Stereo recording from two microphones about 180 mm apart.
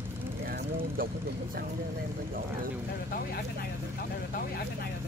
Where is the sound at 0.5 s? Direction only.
55° right (ahead or behind).